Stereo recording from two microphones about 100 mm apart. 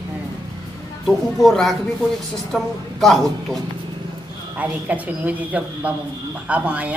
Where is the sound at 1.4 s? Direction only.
Centre (ahead or behind).